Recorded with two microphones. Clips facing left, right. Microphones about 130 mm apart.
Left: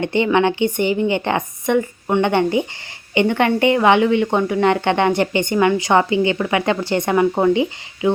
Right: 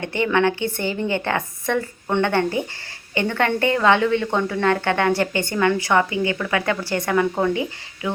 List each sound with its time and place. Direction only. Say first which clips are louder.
0.0 s a woman's voice: left 3 dB; 20° left (ahead or behind)